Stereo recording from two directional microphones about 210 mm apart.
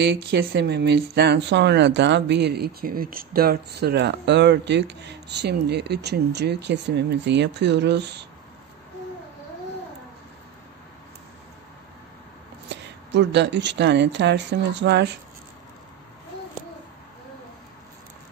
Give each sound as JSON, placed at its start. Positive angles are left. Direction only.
{"t": 0.0, "sound": "speech", "side_deg": -55}
{"t": 12.6, "sound": "speech", "side_deg": -55}